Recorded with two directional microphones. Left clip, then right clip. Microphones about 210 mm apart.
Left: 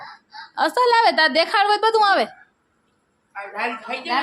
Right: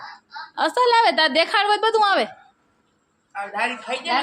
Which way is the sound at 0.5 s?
5° left (ahead or behind).